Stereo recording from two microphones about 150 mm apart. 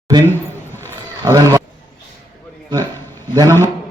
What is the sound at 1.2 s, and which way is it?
Speech, 20° right (ahead or behind).